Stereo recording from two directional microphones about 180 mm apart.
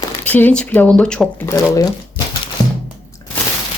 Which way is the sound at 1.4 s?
20° left (ahead or behind).